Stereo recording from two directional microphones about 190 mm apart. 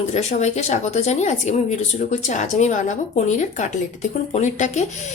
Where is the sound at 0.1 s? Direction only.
35° left (ahead or behind).